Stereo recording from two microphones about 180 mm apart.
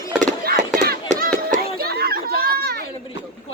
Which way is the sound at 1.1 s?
50° right (ahead or behind).